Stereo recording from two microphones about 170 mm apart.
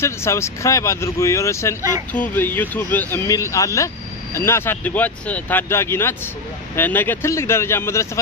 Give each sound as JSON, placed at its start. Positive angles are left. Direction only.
{"t": 0.0, "sound": "speech", "side_deg": 15}
{"t": 1.8, "sound": "speech", "side_deg": -20}
{"t": 2.1, "sound": "speech", "side_deg": 10}